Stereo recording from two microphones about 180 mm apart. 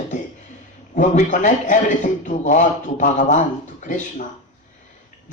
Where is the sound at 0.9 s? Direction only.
45° left (ahead or behind).